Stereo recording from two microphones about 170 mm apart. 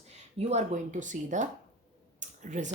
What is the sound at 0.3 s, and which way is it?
Speech, 40° right (ahead or behind).